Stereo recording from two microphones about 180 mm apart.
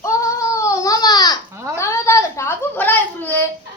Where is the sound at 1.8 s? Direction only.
15° left (ahead or behind).